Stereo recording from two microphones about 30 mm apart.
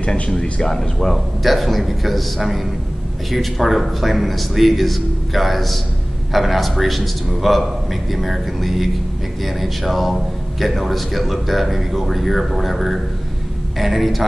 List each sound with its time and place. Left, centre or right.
0.0 s speech: left
0.7 s a man's voice: centre
1.4 s a man's voice: centre